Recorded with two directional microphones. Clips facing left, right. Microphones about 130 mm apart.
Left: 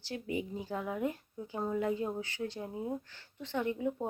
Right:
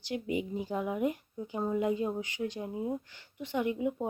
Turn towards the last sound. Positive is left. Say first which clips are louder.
# right 2 dB
turn(degrees=-10)  # may be behind; listen again after turning